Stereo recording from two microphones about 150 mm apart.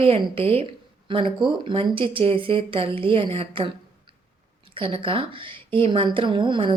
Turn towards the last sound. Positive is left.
turn(degrees=-30)  # may be behind; listen again after turning